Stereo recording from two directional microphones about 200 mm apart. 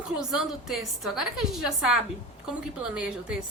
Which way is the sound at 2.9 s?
5° right (ahead or behind).